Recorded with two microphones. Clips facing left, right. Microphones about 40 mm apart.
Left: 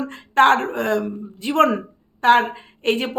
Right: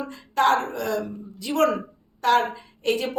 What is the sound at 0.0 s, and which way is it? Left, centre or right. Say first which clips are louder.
A woman's voice: left 6 dB; left.